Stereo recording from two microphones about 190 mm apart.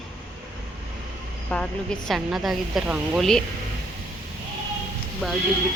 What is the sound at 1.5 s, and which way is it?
A woman's voice, 5° left (ahead or behind).